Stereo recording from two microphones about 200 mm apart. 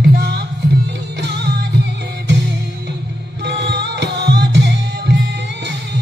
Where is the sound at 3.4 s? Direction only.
60° right (ahead or behind).